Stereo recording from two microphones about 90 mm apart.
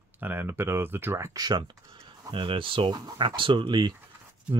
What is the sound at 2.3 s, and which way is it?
Speech, 75° right (ahead or behind).